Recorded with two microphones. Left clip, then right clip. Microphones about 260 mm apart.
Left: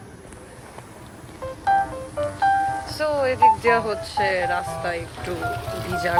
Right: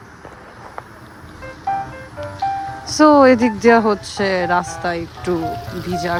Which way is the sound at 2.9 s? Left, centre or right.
Right.